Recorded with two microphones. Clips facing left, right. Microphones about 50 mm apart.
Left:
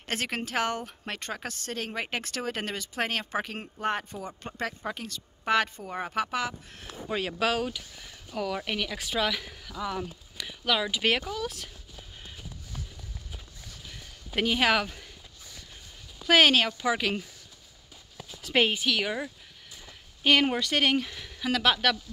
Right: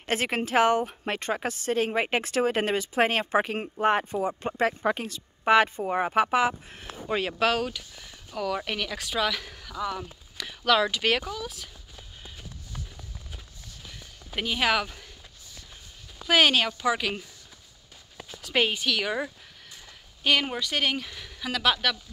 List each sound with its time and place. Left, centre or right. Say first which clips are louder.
0.0 s speech: right 5 dB; centre
5.0 s a woman's voice: right 6 dB; centre
7.1 s speech: right 3 dB; centre
8.9 s speech: right 2 dB; centre
11.3 s speech: left 2 dB; left
14.5 s speech: even; left
16.3 s speech: left 1 dB; left
18.6 s speech: even; centre
20.2 s speech: left 2 dB; left
21.1 s speech: left 1 dB; centre
21.5 s speech: even; left